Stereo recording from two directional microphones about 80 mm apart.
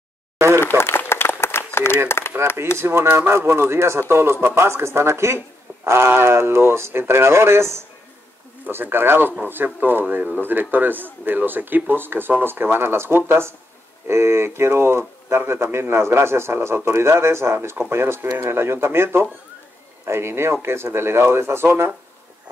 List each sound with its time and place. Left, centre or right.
0.6 s applause: left
2.0 s a sound: left
2.8 s speech: right